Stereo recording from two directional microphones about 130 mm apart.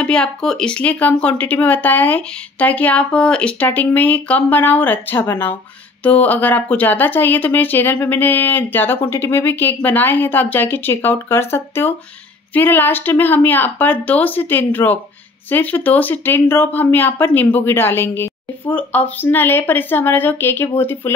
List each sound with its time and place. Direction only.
0.0 s speech: 5° left (ahead or behind)